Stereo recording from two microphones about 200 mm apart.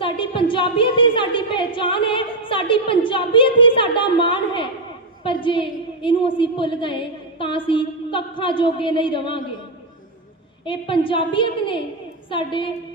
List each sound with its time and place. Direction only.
0.0 s a sound: 25° left (ahead or behind)
5.2 s a woman's voice: 25° left (ahead or behind)
10.7 s a woman's voice: 25° left (ahead or behind)